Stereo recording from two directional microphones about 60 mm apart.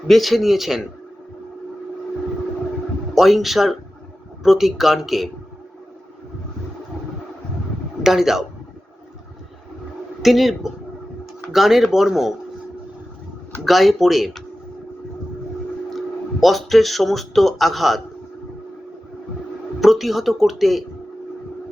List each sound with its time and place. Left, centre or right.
0.1 s speech: centre
3.2 s speech: centre
8.0 s speech: centre
10.2 s speech: centre
13.7 s speech: centre
15.9 s speech: centre
19.8 s speech: centre